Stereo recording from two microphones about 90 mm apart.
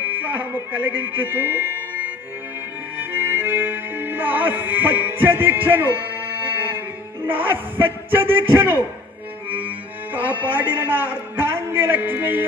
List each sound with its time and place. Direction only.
0.0 s speech: 20° right (ahead or behind)
3.0 s music: 20° right (ahead or behind)
7.2 s a man's voice: 20° right (ahead or behind)
10.1 s a man's voice: 20° right (ahead or behind)